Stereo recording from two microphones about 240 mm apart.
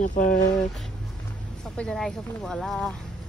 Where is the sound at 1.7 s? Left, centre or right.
Centre.